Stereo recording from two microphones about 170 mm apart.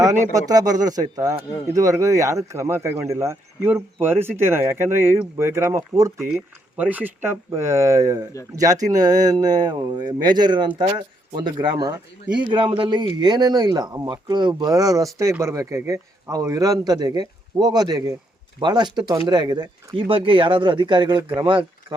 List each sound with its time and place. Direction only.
0.3 s speech: 20° right (ahead or behind)
6.1 s speech: 5° right (ahead or behind); by 22.0 s 30° right (ahead or behind)